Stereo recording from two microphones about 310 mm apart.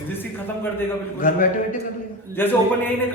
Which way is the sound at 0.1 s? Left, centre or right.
Centre.